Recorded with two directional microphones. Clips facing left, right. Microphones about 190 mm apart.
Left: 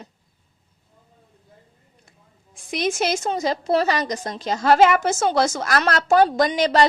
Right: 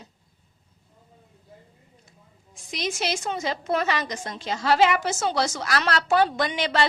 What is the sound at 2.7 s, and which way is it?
A woman's voice, 50° left (ahead or behind).